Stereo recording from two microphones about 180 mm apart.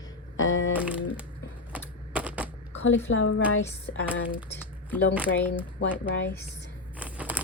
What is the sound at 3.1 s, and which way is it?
Speech, 90° left.